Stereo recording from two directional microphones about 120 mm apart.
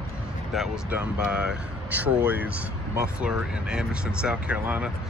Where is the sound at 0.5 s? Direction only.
5° right (ahead or behind).